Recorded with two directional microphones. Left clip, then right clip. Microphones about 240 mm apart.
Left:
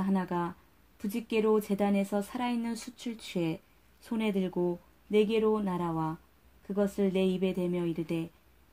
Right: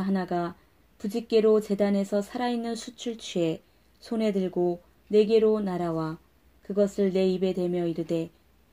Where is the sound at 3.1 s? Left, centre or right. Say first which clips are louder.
Right 6 dB; left.